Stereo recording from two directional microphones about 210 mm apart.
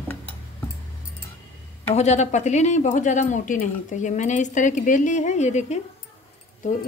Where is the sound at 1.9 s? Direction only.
35° left (ahead or behind).